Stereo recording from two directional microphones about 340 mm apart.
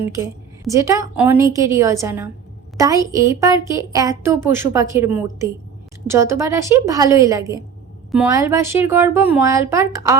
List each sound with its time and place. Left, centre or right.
0.6 s a woman's voice: centre